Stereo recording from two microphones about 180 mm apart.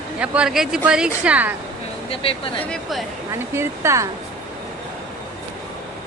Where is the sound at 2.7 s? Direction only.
Centre (ahead or behind).